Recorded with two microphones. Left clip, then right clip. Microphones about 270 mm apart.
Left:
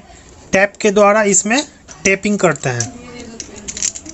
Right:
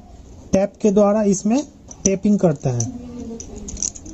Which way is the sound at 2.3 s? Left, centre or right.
Left.